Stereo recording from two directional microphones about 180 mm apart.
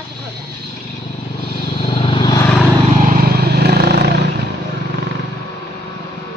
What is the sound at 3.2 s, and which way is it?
Vehicle, 60° right (ahead or behind).